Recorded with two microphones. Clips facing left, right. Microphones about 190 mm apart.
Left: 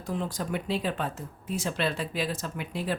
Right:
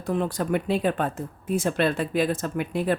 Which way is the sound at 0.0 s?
60° right (ahead or behind).